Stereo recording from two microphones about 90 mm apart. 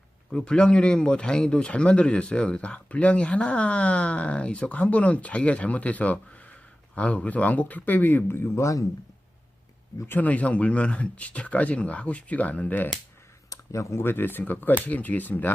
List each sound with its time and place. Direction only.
0.3 s speech: 10° left (ahead or behind); by 8.8 s 35° left (ahead or behind)
10.2 s speech: 15° left (ahead or behind)
13.5 s speech: 30° left (ahead or behind)